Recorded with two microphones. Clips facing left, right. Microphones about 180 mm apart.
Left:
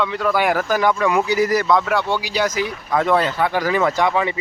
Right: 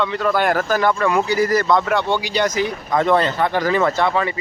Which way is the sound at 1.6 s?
5° left (ahead or behind).